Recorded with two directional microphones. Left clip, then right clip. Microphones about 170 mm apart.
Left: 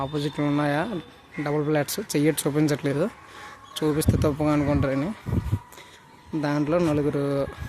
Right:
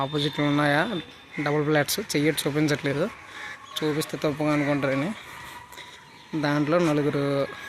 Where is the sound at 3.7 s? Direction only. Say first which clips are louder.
Left 3 dB; 30° left (ahead or behind); by 5.2 s 15° left (ahead or behind).